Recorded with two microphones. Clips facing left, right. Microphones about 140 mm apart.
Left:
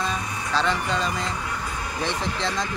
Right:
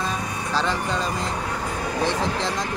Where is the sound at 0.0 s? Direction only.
5° right (ahead or behind).